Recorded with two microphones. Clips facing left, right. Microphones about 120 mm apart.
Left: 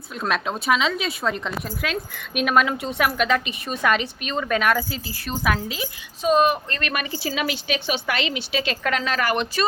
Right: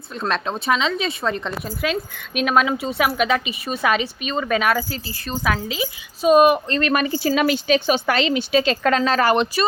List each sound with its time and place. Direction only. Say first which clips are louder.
0.2 s a woman's voice: right 1 dB; 5° left (ahead or behind)
6.7 s a woman's voice: right 8 dB; 30° right (ahead or behind)